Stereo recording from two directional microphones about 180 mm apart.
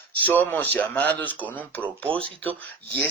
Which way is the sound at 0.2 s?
10° left (ahead or behind).